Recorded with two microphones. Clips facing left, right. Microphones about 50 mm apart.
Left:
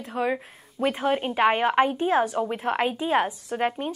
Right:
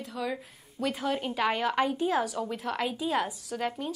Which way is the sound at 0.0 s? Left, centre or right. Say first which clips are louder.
Left 7 dB; left.